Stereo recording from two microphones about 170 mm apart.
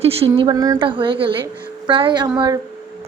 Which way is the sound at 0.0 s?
35° right (ahead or behind).